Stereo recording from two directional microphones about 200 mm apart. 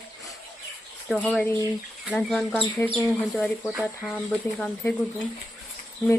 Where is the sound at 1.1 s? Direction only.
5° left (ahead or behind).